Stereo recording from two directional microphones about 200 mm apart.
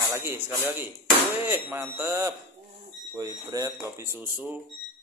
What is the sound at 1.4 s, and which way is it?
Speech, 10° right (ahead or behind).